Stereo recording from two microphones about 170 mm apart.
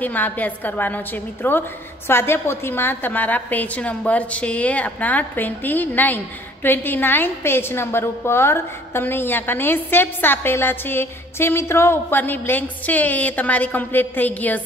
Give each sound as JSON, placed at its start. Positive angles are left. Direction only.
{"t": 0.0, "sound": "a woman's voice", "side_deg": 10}